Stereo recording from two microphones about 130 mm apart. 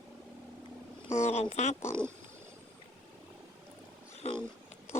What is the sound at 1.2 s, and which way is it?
Speech, 60° left (ahead or behind).